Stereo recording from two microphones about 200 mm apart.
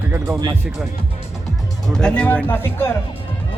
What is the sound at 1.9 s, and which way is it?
Speech, 5° left (ahead or behind).